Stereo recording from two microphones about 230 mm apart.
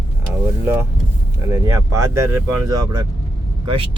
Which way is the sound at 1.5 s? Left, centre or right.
Centre.